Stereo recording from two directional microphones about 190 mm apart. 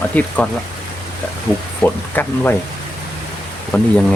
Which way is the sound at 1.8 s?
10° left (ahead or behind).